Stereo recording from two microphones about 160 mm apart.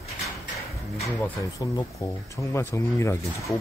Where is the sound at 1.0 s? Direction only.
20° left (ahead or behind).